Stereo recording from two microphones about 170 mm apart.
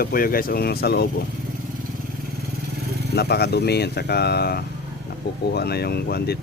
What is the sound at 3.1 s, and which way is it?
Speech, 70° left (ahead or behind).